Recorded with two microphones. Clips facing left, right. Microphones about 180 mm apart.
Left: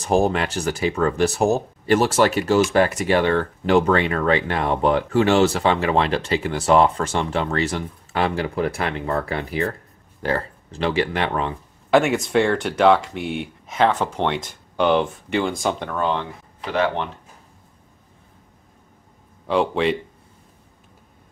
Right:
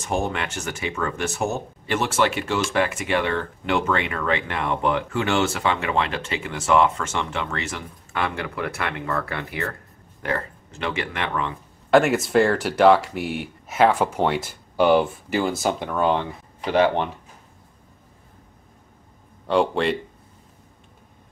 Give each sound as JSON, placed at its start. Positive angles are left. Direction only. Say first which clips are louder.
{"t": 0.0, "sound": "speech", "louder": "left 6 dB", "side_deg": 35}
{"t": 11.9, "sound": "speech", "louder": "even", "side_deg": 0}
{"t": 19.4, "sound": "speech", "louder": "left 1 dB", "side_deg": 0}